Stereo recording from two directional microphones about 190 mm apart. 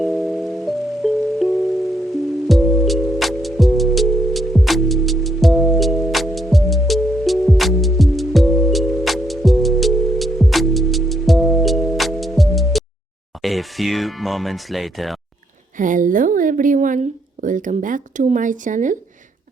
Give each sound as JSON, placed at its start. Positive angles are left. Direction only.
{"t": 0.6, "sound": "music", "side_deg": 0}
{"t": 13.4, "sound": "speech", "side_deg": 0}
{"t": 15.8, "sound": "speech", "side_deg": -45}